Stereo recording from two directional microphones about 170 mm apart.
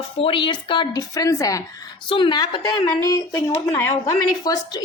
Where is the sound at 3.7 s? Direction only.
15° left (ahead or behind).